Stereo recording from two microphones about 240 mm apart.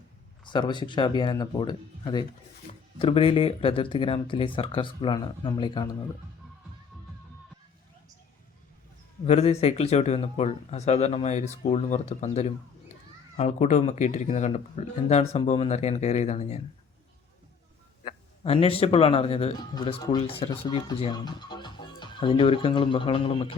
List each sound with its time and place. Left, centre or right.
0.4 s speech: centre
9.2 s speech: left
18.0 s speech: left